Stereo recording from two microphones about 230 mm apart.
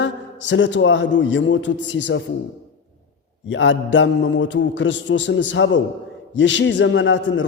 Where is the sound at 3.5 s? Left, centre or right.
Left.